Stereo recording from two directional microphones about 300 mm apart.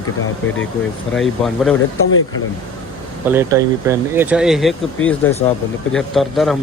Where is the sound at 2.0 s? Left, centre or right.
Left.